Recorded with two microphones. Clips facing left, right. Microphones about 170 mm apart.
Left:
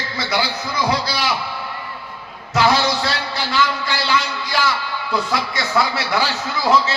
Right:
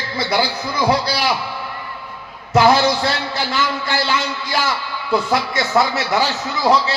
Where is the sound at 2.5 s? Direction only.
50° right (ahead or behind).